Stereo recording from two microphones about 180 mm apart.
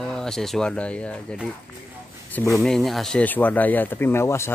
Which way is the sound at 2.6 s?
Centre (ahead or behind).